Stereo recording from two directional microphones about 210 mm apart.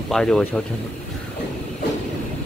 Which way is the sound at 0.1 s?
5° left (ahead or behind).